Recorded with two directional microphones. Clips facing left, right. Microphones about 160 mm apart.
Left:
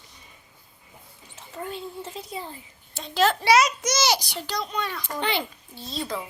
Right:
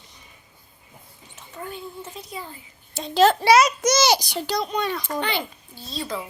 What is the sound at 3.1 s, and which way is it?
A child's voice, 30° right (ahead or behind).